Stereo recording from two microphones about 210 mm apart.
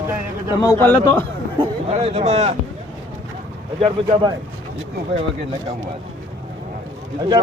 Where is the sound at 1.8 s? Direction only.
30° right (ahead or behind).